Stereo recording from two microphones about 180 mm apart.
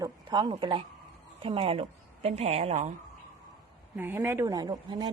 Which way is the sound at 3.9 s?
10° right (ahead or behind).